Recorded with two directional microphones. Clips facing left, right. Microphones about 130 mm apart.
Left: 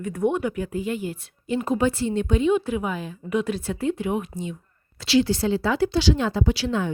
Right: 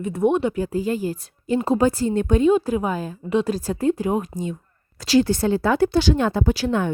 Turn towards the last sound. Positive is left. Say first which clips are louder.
# right 3 dB
turn(degrees=-55)  # may be behind; listen again after turning